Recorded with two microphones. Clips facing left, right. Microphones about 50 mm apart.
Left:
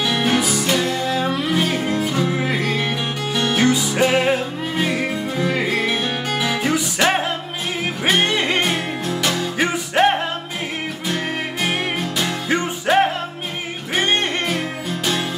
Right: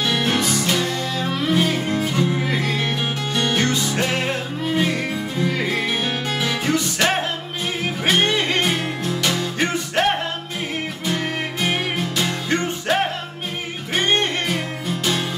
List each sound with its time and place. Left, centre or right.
0.1 s music: centre
8.6 s music: centre
11.6 s music: centre